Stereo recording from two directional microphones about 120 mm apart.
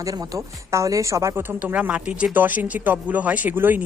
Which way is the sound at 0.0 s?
25° right (ahead or behind).